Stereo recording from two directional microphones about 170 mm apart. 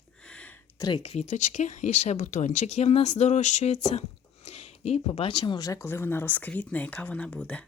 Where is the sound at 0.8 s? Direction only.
25° left (ahead or behind).